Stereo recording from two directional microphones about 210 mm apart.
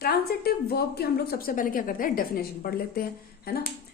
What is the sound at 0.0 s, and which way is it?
A woman's voice, 45° left (ahead or behind).